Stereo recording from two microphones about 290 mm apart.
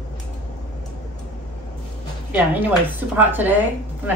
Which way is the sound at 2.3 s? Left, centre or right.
Centre.